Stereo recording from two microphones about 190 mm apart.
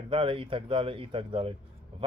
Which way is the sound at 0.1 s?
30° right (ahead or behind).